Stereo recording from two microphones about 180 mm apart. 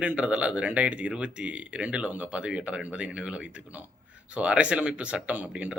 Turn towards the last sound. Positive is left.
turn(degrees=-5)  # may be behind; listen again after turning